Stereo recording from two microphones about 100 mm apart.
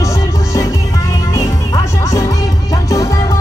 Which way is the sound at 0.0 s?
30° left (ahead or behind).